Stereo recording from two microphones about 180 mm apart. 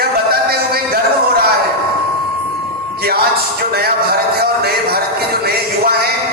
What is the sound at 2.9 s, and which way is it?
Music, 60° right (ahead or behind).